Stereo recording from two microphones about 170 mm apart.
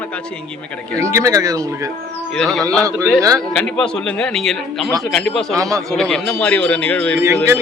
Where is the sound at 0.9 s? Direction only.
15° right (ahead or behind).